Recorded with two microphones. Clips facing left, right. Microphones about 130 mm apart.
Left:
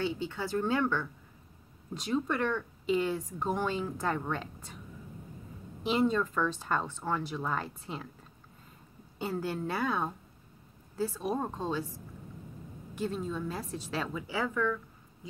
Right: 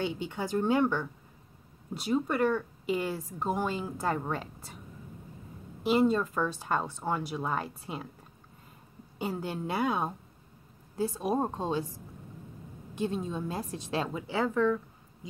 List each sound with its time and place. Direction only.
0.2 s a woman's voice: 15° right (ahead or behind)
5.9 s speech: 10° right (ahead or behind)
9.2 s a woman's voice: 15° right (ahead or behind)
12.9 s a woman's voice: 20° right (ahead or behind)